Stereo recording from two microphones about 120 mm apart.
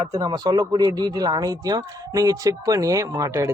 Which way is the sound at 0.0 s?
35° right (ahead or behind).